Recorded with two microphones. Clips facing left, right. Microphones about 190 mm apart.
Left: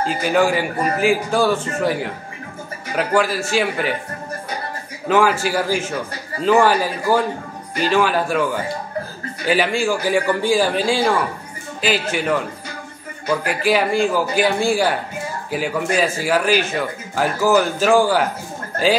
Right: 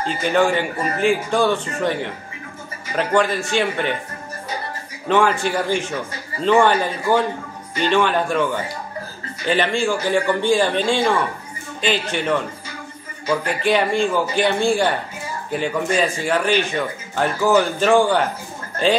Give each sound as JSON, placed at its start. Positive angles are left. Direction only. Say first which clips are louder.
{"t": 0.0, "sound": "speech", "louder": "left 1 dB", "side_deg": 5}
{"t": 5.0, "sound": "a man's voice", "louder": "left 1 dB", "side_deg": 5}